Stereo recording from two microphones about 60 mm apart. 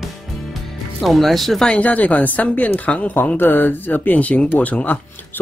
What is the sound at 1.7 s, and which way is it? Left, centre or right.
A woman's voice, left.